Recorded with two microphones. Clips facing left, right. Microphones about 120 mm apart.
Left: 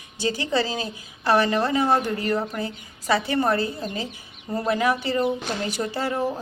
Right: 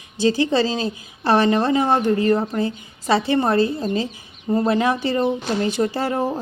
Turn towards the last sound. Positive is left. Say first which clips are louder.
# right 4 dB
turn(degrees=-30)  # may be behind; listen again after turning